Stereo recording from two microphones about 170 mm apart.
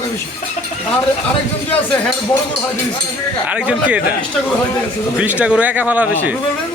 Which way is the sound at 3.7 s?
5° right (ahead or behind).